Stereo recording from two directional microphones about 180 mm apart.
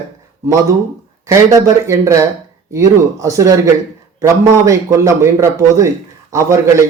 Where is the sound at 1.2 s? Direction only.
15° right (ahead or behind).